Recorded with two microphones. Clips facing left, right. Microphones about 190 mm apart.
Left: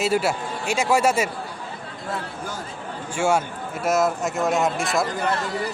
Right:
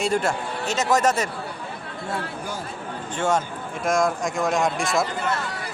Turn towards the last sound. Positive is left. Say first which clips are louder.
# even
turn(degrees=0)  # may be behind; listen again after turning